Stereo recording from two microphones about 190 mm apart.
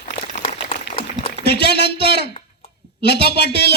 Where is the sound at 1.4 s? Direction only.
60° left (ahead or behind).